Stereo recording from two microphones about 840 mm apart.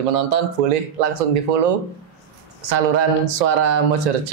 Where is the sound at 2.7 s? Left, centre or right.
Right.